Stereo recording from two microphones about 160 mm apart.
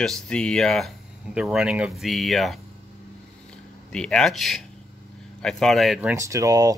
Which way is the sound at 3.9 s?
5° left (ahead or behind).